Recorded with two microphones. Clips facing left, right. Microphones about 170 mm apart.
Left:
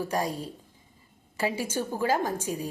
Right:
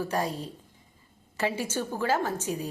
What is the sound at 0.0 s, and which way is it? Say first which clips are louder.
A woman's voice: even; 10° left (ahead or behind).